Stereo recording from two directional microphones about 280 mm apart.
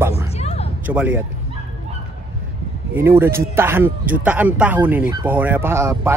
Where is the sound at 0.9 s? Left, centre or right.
Centre.